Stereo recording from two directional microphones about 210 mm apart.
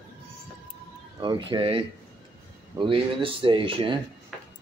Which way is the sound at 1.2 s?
20° right (ahead or behind).